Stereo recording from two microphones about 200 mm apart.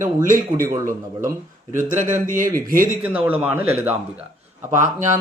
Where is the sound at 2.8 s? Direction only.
10° right (ahead or behind).